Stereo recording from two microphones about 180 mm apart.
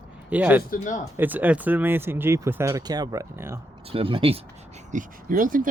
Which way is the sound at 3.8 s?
30° right (ahead or behind).